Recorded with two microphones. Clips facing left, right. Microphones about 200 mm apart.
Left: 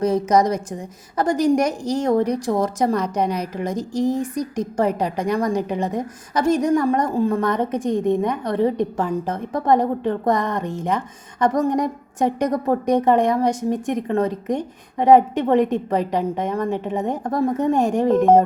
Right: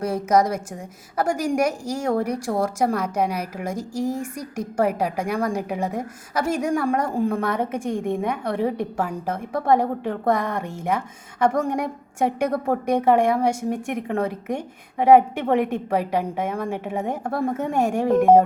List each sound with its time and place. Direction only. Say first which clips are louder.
0.0 s a woman's voice: left 3 dB; 5° right (ahead or behind)
7.9 s a woman's voice: left 7 dB; 20° left (ahead or behind)
8.3 s a woman's voice: left 3 dB; 10° right (ahead or behind)